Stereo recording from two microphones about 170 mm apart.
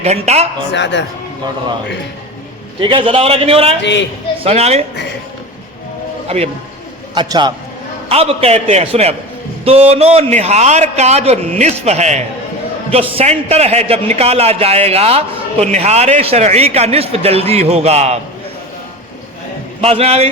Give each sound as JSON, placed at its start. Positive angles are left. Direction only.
{"t": 0.0, "sound": "a man's voice", "side_deg": -40}
{"t": 0.7, "sound": "a man's voice", "side_deg": 90}
{"t": 2.8, "sound": "a man's voice", "side_deg": -30}
{"t": 6.2, "sound": "speech", "side_deg": -35}
{"t": 7.1, "sound": "a man's voice", "side_deg": -25}
{"t": 8.1, "sound": "a man's voice", "side_deg": -35}
{"t": 19.8, "sound": "a man's voice", "side_deg": -35}